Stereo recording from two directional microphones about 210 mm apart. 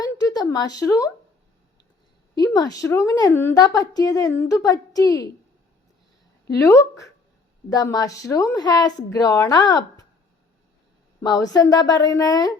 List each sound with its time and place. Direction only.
0.0 s a sound: 15° left (ahead or behind)
2.3 s a woman's voice: 20° left (ahead or behind)
6.6 s a woman's voice: 15° left (ahead or behind)
11.2 s a woman's voice: 15° left (ahead or behind)